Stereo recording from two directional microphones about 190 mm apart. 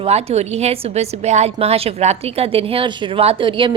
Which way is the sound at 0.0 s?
35° right (ahead or behind).